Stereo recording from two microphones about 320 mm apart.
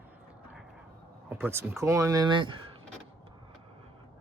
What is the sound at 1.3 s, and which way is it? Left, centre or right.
Speech, centre.